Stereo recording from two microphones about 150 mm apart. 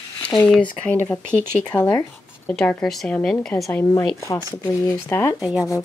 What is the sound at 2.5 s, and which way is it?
Speech, 10° left (ahead or behind).